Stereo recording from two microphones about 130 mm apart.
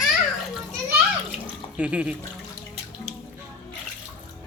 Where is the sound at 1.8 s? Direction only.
10° right (ahead or behind).